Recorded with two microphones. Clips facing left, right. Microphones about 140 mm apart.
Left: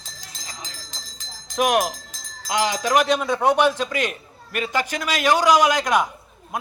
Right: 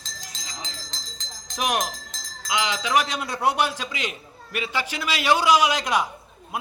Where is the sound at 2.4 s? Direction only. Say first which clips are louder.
Left 4 dB; 45° left (ahead or behind).